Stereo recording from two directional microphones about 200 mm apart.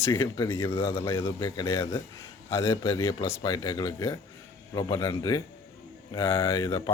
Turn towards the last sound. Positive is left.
turn(degrees=20)  # may be behind; listen again after turning